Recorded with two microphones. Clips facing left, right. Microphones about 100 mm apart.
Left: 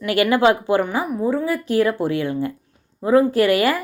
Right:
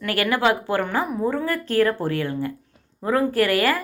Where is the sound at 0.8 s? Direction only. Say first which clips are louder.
Left 2 dB; 10° left (ahead or behind).